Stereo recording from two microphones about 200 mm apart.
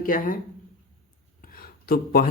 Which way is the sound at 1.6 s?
50° left (ahead or behind).